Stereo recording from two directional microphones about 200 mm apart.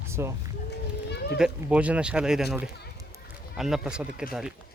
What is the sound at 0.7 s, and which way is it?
Run, 55° left (ahead or behind).